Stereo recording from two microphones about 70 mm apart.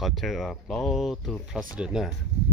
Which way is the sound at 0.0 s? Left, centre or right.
Centre.